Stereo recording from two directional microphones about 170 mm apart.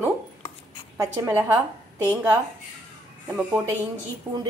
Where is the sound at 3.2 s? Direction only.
15° right (ahead or behind).